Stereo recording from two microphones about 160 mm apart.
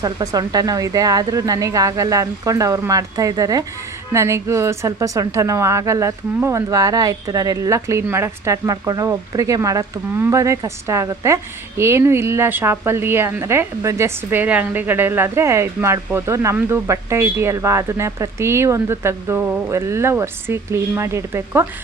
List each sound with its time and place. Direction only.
0.0 s a woman's voice: 25° right (ahead or behind)